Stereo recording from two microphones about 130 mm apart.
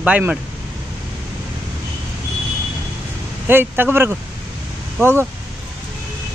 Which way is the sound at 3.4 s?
15° right (ahead or behind).